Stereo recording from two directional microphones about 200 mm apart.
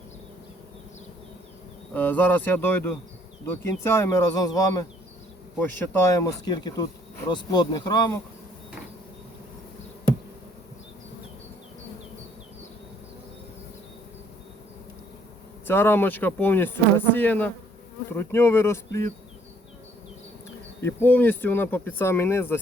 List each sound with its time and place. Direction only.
1.9 s speech: 10° left (ahead or behind)
15.6 s speech: 10° left (ahead or behind)
20.8 s speech: 10° left (ahead or behind)